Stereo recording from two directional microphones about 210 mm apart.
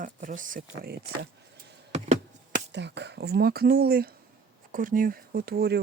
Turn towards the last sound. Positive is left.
turn(degrees=-50)  # may be behind; listen again after turning